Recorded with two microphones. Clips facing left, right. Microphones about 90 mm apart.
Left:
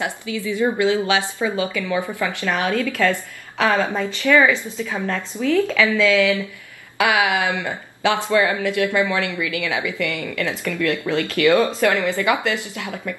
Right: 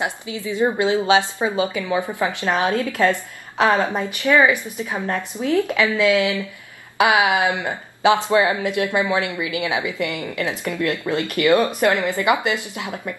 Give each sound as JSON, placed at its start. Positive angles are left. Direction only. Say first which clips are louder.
{"t": 0.0, "sound": "a woman's voice", "louder": "left 1 dB", "side_deg": -20}